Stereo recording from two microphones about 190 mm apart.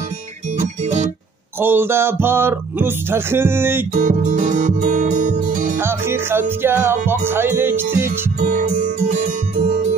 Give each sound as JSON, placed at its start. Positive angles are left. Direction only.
{"t": 0.6, "sound": "guitar", "side_deg": -40}
{"t": 1.6, "sound": "music", "side_deg": -10}
{"t": 3.9, "sound": "music", "side_deg": -45}
{"t": 5.8, "sound": "music", "side_deg": -10}
{"t": 8.4, "sound": "music", "side_deg": -40}